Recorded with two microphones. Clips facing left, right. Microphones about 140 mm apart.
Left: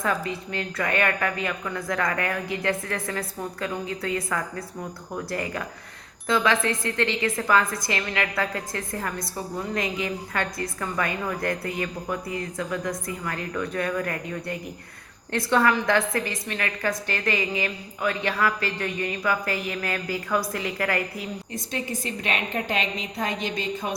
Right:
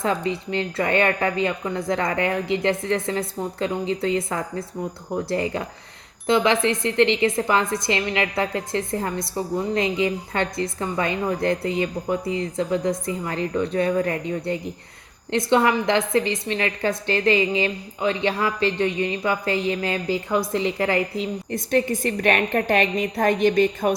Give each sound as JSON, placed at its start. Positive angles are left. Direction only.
{"t": 0.0, "sound": "a woman's voice", "side_deg": -25}
{"t": 21.5, "sound": "a woman's voice", "side_deg": -55}